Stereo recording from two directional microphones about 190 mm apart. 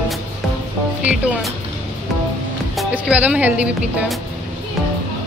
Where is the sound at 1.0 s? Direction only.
5° right (ahead or behind).